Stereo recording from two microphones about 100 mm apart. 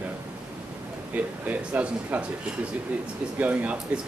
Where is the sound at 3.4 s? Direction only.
15° right (ahead or behind).